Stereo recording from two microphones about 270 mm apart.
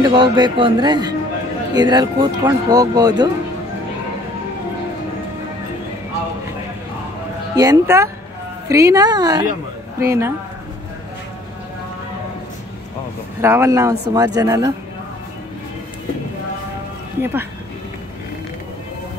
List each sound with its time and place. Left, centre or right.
0.0 s speech: centre
7.5 s speech: centre
13.4 s speech: centre
17.2 s speech: centre